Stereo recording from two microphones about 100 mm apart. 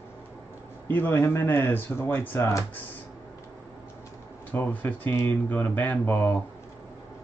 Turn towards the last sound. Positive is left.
turn(degrees=20)  # may be behind; listen again after turning